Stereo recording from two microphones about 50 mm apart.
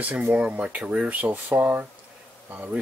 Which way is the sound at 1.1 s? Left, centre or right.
Right.